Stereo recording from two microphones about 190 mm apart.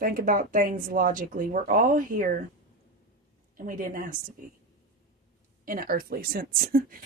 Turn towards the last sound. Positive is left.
turn(degrees=-50)  # may be behind; listen again after turning